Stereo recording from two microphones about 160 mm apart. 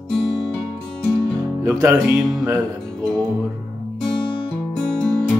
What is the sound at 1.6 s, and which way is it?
Music, 15° right (ahead or behind).